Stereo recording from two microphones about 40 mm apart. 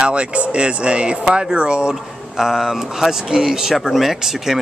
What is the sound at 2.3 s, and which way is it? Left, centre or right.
Speech, centre.